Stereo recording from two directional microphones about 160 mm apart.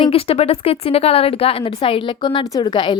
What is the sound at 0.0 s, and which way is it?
A woman's voice, 35° left (ahead or behind).